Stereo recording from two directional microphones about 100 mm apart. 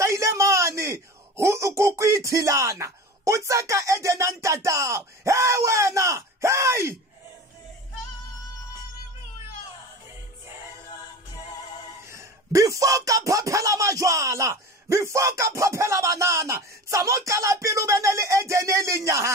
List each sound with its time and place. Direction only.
0.0 s a man's voice: 30° right (ahead or behind)
12.1 s speech: 30° right (ahead or behind)